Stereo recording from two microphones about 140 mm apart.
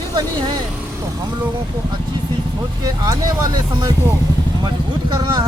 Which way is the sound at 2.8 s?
25° right (ahead or behind).